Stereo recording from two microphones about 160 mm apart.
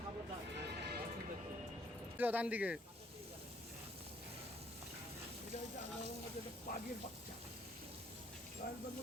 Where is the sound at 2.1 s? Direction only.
10° right (ahead or behind).